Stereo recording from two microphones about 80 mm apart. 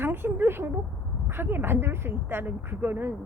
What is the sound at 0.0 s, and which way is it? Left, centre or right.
A woman's voice, right.